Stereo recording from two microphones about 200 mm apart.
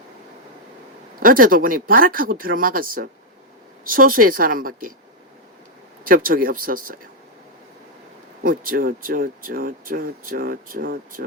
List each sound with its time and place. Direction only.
1.2 s speech: 45° right (ahead or behind)
6.1 s speech: 45° right (ahead or behind)
8.4 s speech: 45° right (ahead or behind)